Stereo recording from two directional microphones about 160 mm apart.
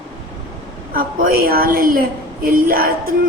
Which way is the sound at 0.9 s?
65° right (ahead or behind).